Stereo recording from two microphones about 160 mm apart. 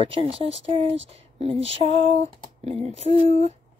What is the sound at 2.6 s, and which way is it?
Speech, 40° right (ahead or behind).